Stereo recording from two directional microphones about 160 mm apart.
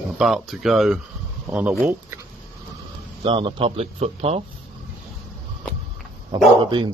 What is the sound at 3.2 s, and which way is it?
A man's voice, 30° right (ahead or behind).